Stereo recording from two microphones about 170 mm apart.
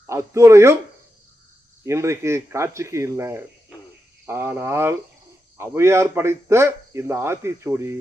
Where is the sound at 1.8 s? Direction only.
15° right (ahead or behind).